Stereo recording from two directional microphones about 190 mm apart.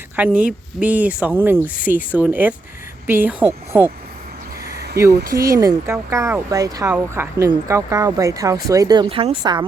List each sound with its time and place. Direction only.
0.2 s speech: 10° right (ahead or behind)
4.6 s a sound: 55° right (ahead or behind)
5.1 s speech: 50° right (ahead or behind)
5.4 s speech: 15° right (ahead or behind)